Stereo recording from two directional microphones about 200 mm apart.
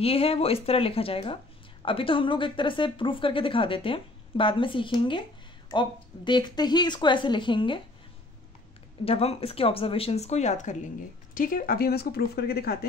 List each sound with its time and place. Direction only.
0.0 s speech: 30° left (ahead or behind)
9.0 s a woman's voice: 30° left (ahead or behind); by 12.7 s 50° left (ahead or behind)